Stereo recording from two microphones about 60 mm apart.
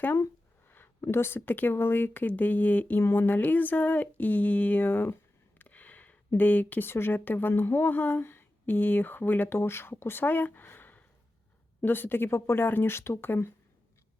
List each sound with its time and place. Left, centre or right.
1.1 s speech: left
3.0 s a sound: left
6.8 s speech: left